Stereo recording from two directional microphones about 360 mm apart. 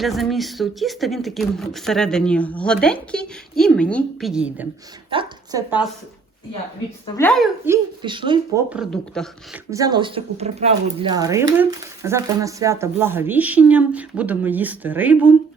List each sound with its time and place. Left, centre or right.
0.0 s a woman's voice: centre
7.2 s speech: centre